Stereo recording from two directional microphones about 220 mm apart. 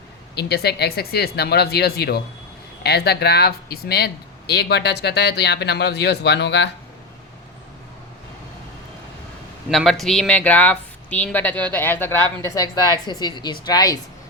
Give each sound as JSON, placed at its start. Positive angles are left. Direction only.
{"t": 0.3, "sound": "speech", "side_deg": 45}
{"t": 9.6, "sound": "speech", "side_deg": 0}